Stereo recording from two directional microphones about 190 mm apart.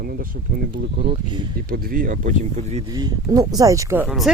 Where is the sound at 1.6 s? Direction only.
50° right (ahead or behind); by 2.8 s 35° right (ahead or behind).